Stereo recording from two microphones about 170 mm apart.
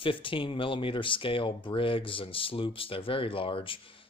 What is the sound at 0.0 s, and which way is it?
Speech, 30° left (ahead or behind).